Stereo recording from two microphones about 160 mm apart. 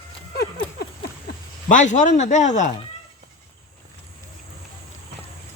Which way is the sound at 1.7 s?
50° left (ahead or behind).